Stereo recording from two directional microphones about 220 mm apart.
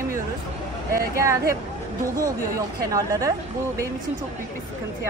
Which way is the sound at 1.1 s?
15° right (ahead or behind).